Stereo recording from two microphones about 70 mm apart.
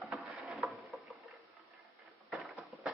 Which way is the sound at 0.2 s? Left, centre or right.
Centre.